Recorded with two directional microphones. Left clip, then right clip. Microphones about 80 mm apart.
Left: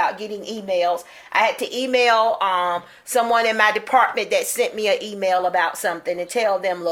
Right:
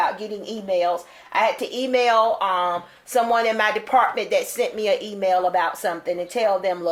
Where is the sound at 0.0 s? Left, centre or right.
Left.